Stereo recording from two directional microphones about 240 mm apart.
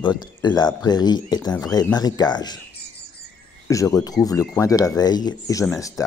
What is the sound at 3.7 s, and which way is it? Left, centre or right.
Speech, centre.